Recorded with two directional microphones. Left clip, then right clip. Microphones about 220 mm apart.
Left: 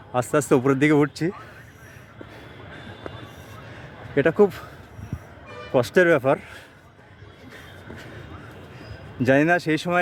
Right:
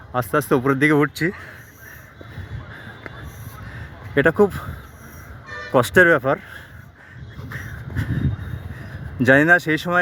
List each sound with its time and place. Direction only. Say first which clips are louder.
0.1 s speech: right 1 dB; 5° right (ahead or behind)
4.1 s speech: right 2 dB; 10° right (ahead or behind)
5.5 s music: right 6 dB; 40° right (ahead or behind)
5.7 s speech: right 4 dB; 15° right (ahead or behind)
9.2 s speech: right 5 dB; 15° right (ahead or behind)